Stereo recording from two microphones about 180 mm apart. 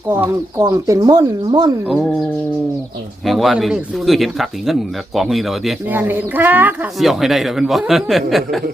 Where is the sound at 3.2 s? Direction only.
Centre (ahead or behind).